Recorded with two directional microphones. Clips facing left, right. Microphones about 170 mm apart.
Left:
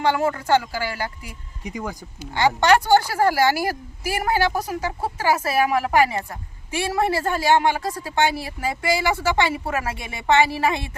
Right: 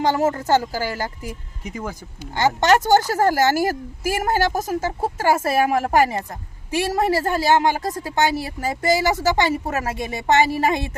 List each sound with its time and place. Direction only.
0.0 s a woman's voice: 40° right (ahead or behind)
1.6 s speech: centre (ahead or behind)
2.3 s a woman's voice: 45° right (ahead or behind)